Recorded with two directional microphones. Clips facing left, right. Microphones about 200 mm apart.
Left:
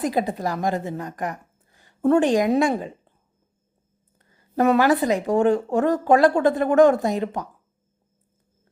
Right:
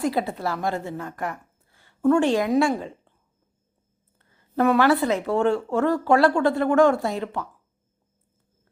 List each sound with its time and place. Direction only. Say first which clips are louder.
0.0 s a woman's voice: left 1 dB; 15° left (ahead or behind)
4.2 s a sound: left 1 dB; 15° left (ahead or behind)
4.8 s speech: left 1 dB; 15° left (ahead or behind)